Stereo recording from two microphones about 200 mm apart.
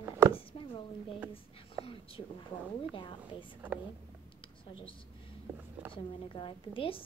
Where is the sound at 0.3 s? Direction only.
25° left (ahead or behind).